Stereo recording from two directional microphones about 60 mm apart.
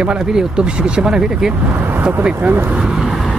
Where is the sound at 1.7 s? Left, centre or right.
Right.